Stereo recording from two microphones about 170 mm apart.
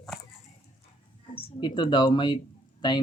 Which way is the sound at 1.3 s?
30° left (ahead or behind).